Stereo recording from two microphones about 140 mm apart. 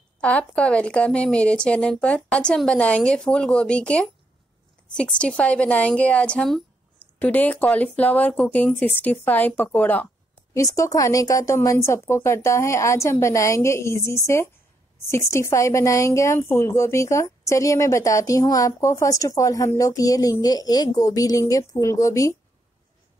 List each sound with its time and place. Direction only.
0.2 s speech: 10° left (ahead or behind)
10.5 s a woman's voice: 25° left (ahead or behind)